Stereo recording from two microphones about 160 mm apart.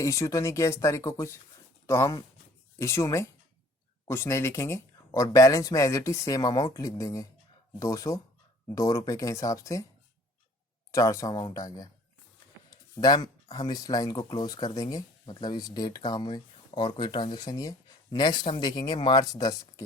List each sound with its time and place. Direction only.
0.0 s speech: 20° left (ahead or behind)
10.9 s speech: 20° left (ahead or behind)
13.0 s speech: 25° left (ahead or behind)